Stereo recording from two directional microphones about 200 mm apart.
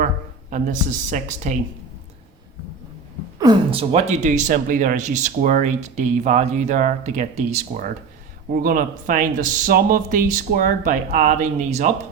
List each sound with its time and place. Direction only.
0.5 s speech: 40° right (ahead or behind)
3.3 s speech: 20° right (ahead or behind)
8.6 s speech: 45° right (ahead or behind)